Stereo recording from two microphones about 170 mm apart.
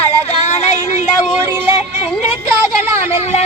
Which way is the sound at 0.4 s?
40° left (ahead or behind).